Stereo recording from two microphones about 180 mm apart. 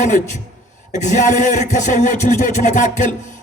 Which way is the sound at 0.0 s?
45° left (ahead or behind).